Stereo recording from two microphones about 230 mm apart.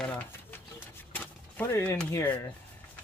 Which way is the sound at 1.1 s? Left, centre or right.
Centre.